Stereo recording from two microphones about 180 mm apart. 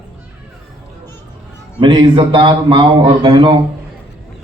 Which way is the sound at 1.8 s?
25° right (ahead or behind).